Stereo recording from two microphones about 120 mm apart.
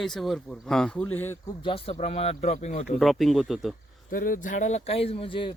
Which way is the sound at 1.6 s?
45° left (ahead or behind).